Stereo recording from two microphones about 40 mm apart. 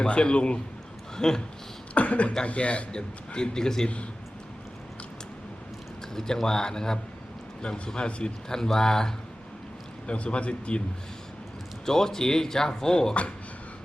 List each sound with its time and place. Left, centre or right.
0.0 s speech: left
1.1 s speech: centre
2.0 s speech: left
2.9 s speech: left
6.1 s speech: centre
8.4 s speech: centre
10.1 s speech: left
11.9 s speech: centre